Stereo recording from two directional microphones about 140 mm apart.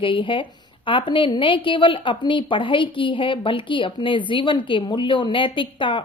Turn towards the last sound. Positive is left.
turn(degrees=35)  # may be behind; listen again after turning